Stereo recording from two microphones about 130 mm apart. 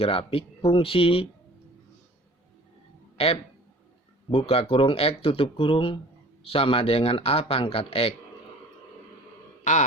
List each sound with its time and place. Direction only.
0.0 s speech: 45° left (ahead or behind)
3.2 s speech: 50° left (ahead or behind)